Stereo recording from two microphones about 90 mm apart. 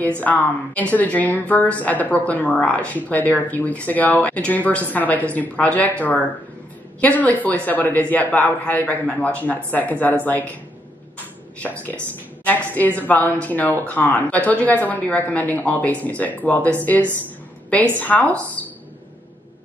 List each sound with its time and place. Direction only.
0.0 s a woman's voice: 15° left (ahead or behind)
12.4 s a woman's voice: 20° left (ahead or behind)
17.9 s a woman's voice: 15° left (ahead or behind)